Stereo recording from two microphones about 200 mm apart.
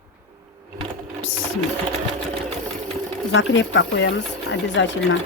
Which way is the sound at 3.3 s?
70° left (ahead or behind).